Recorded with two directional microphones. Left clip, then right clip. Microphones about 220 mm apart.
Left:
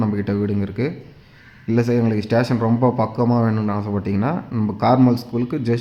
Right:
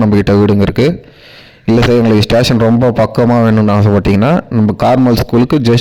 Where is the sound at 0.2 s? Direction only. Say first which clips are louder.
Right 13 dB; 40° right (ahead or behind).